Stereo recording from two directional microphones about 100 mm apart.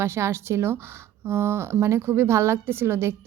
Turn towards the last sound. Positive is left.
turn(degrees=-25)  # may be behind; listen again after turning